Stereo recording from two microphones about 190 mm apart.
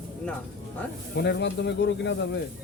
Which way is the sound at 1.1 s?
60° left (ahead or behind).